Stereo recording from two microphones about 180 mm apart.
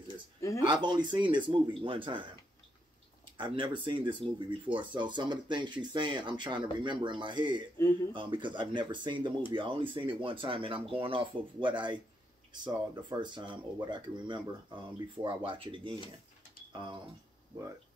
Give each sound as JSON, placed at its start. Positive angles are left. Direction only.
{"t": 0.7, "sound": "speech", "side_deg": -25}
{"t": 3.3, "sound": "speech", "side_deg": -25}